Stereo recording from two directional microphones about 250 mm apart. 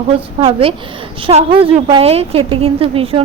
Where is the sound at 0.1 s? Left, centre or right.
Right.